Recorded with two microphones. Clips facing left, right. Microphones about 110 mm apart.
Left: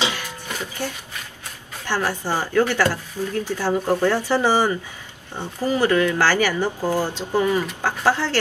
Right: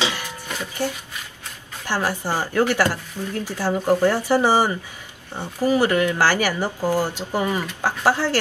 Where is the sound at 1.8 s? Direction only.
15° right (ahead or behind).